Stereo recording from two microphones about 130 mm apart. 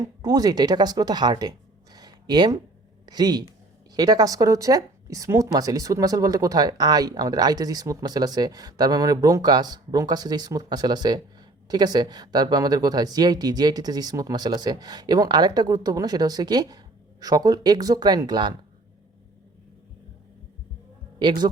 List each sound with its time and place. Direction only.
0.0 s speech: 30° right (ahead or behind)
21.2 s speech: 35° right (ahead or behind)